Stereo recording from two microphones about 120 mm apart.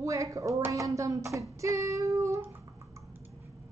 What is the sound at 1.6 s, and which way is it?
Child singing, 25° right (ahead or behind).